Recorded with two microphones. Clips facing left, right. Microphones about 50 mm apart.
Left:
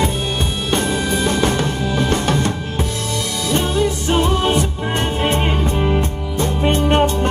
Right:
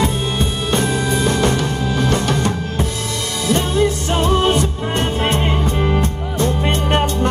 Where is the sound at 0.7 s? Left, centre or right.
Left.